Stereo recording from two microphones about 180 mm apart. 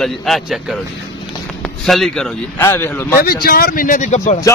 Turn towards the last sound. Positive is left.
turn(degrees=40)  # may be behind; listen again after turning